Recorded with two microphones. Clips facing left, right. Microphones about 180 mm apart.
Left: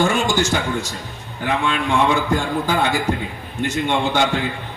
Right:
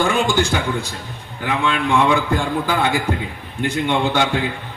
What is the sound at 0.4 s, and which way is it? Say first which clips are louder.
Speech: even; 55° right (ahead or behind).